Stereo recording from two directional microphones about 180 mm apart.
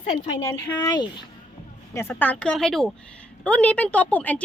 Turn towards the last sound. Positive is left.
turn(degrees=10)  # may be behind; listen again after turning